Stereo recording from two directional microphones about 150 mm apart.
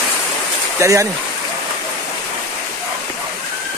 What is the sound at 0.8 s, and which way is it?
Speech, 20° right (ahead or behind).